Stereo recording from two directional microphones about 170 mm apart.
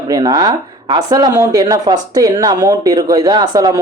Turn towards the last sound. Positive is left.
turn(degrees=-20)  # may be behind; listen again after turning